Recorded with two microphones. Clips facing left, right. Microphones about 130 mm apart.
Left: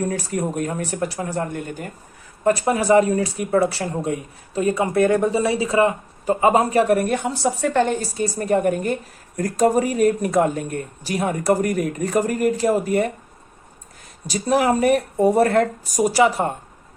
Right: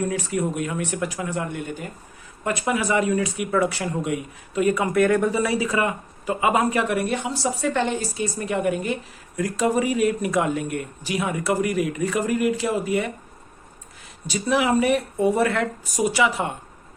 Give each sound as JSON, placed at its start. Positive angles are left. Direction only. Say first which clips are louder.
{"t": 0.1, "sound": "speech", "louder": "left 1 dB", "side_deg": 40}
{"t": 14.3, "sound": "speech", "louder": "left 3 dB", "side_deg": 40}